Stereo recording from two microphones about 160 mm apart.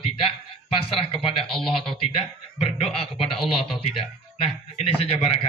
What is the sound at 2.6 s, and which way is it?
A man's voice, 35° left (ahead or behind).